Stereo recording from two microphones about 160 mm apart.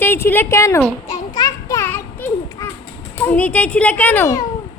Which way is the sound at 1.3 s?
20° left (ahead or behind).